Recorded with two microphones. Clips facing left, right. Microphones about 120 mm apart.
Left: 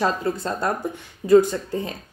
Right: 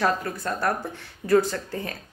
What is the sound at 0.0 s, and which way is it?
A woman's voice, 25° left (ahead or behind).